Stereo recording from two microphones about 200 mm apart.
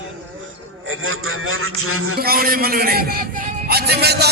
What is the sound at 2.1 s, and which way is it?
A man's voice, 50° right (ahead or behind).